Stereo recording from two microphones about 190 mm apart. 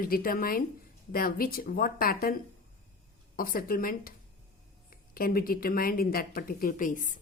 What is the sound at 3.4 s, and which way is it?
A woman's voice, 50° left (ahead or behind).